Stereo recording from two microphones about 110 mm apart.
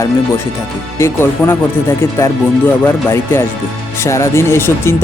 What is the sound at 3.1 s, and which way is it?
Speech, 25° left (ahead or behind).